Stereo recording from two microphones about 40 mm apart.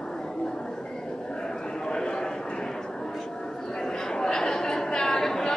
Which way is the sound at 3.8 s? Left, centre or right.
Centre.